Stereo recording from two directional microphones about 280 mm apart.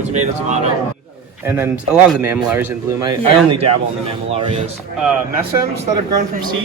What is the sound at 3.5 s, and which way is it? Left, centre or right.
Speech, right.